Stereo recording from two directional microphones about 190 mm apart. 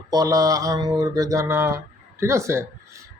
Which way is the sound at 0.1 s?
20° right (ahead or behind).